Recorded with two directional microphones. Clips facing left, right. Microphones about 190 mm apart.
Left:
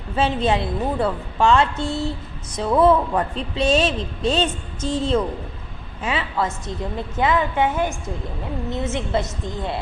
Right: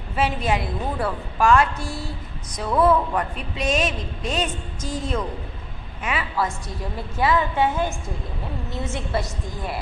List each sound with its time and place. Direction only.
0.1 s a woman's voice: 25° left (ahead or behind)